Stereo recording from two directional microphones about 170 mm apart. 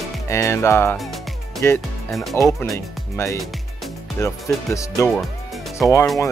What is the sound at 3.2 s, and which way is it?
Speech, 15° left (ahead or behind).